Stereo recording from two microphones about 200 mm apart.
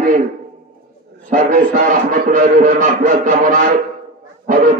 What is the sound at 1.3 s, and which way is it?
A man's voice, 40° right (ahead or behind).